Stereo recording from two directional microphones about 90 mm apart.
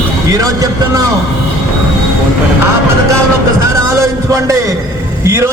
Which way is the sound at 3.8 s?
35° right (ahead or behind).